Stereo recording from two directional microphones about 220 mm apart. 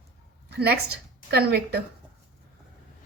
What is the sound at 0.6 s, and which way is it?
A woman's voice, 45° right (ahead or behind).